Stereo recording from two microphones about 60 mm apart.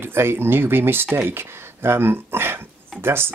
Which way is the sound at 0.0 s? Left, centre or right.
Right.